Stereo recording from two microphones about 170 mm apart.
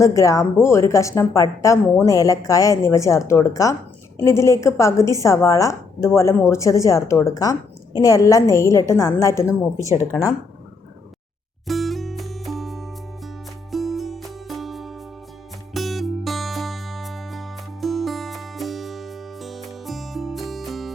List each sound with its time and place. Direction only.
0.0 s a woman's voice: 20° left (ahead or behind)
9.7 s speech: 15° right (ahead or behind)
11.7 s music: centre (ahead or behind)